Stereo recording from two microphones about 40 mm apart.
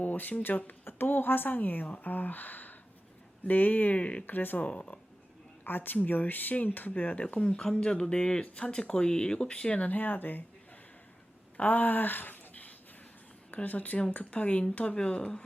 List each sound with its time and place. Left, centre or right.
0.0 s a sound: left
0.4 s speech: left
0.9 s speech: left
4.3 s speech: left
4.6 s speech: left
5.6 s speech: left
9.8 s speech: left
11.5 s speech: left